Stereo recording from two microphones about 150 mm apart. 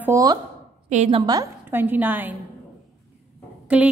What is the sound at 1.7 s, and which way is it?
Speech, 10° right (ahead or behind).